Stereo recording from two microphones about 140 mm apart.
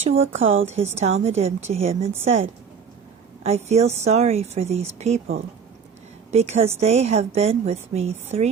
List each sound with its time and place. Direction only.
0.0 s a woman's voice: 45° right (ahead or behind)
6.3 s a woman's voice: 50° right (ahead or behind)